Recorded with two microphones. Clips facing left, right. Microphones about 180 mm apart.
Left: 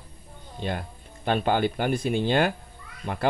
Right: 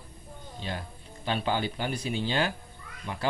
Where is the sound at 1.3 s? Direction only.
55° left (ahead or behind).